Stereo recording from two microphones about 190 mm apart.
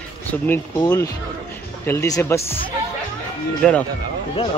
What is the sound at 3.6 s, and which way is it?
Speech, 5° left (ahead or behind).